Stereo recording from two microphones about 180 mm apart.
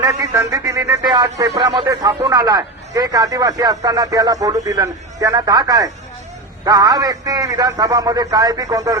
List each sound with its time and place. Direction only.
0.0 s a man's voice: 20° right (ahead or behind)